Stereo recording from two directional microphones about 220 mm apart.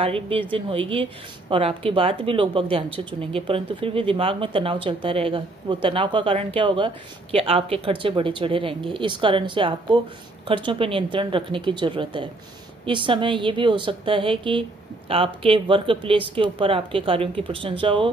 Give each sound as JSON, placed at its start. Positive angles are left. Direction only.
{"t": 0.0, "sound": "speech", "side_deg": -25}